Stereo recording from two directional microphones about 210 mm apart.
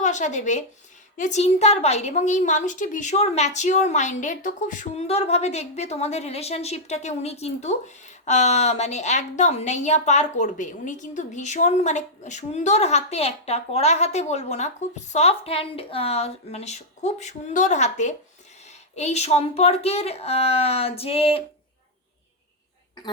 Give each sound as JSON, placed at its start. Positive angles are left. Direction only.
{"t": 0.0, "sound": "a woman's voice", "side_deg": 35}